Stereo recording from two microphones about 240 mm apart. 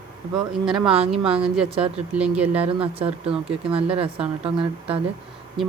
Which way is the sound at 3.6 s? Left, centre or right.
Right.